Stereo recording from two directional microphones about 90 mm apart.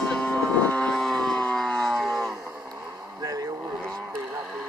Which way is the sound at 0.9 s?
5° left (ahead or behind).